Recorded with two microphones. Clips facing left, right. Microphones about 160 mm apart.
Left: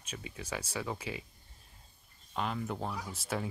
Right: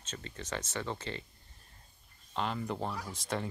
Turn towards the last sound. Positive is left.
turn(degrees=5)  # may be behind; listen again after turning